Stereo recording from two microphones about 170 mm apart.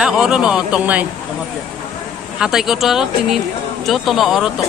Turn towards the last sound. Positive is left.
turn(degrees=0)  # may be behind; listen again after turning